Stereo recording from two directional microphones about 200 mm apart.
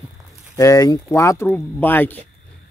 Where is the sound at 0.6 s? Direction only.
15° left (ahead or behind).